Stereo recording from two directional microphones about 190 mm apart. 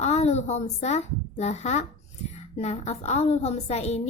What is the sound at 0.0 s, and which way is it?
Speech, 35° left (ahead or behind).